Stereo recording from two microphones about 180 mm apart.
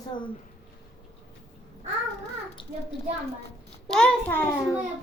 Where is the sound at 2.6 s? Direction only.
30° left (ahead or behind).